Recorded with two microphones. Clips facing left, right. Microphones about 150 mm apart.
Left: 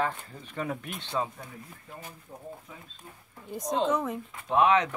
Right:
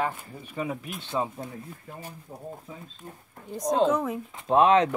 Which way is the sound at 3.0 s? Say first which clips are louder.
Right 7 dB; 40° right (ahead or behind).